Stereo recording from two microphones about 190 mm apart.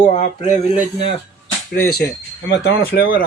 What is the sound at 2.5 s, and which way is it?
Speech, 55° left (ahead or behind).